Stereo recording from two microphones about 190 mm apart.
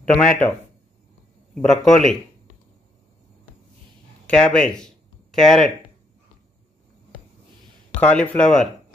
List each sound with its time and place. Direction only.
0.0 s a man's voice: 5° left (ahead or behind)
4.3 s a man's voice: 5° left (ahead or behind)
8.0 s a man's voice: 5° left (ahead or behind)